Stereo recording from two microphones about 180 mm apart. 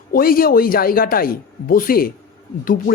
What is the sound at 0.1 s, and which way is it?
A man's voice, 55° left (ahead or behind).